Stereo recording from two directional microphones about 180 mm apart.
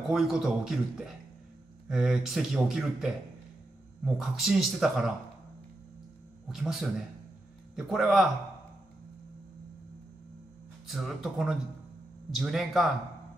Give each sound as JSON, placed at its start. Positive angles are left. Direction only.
{"t": 0.0, "sound": "speech", "side_deg": 0}
{"t": 6.5, "sound": "speech", "side_deg": 0}
{"t": 10.9, "sound": "speech", "side_deg": 0}